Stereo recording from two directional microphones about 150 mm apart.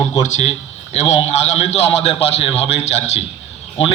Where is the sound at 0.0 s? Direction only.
50° left (ahead or behind).